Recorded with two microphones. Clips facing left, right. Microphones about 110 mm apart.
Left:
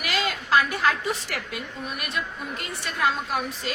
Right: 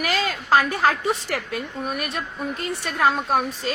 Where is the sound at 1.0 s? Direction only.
40° right (ahead or behind).